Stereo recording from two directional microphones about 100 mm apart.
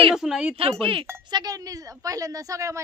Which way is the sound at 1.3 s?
40° right (ahead or behind).